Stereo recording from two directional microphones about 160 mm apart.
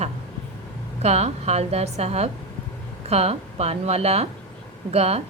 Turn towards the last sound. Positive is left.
turn(degrees=-40)  # may be behind; listen again after turning